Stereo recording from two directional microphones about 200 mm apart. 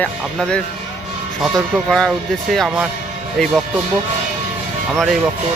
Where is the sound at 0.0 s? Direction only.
5° left (ahead or behind).